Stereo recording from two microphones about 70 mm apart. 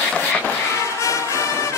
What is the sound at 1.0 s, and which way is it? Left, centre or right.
Music, left.